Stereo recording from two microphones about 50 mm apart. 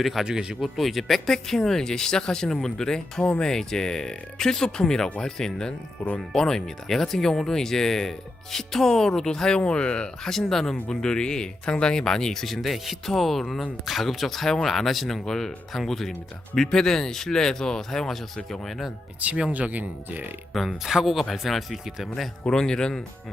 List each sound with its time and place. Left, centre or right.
0.0 s speech: centre
0.3 s speech: centre
0.6 s speech: centre; by 10.1 s left
10.5 s speech: centre
19.2 s speech: right
20.5 s speech: centre
22.4 s speech: centre